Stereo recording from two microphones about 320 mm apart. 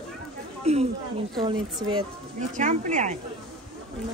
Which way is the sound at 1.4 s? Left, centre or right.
Centre.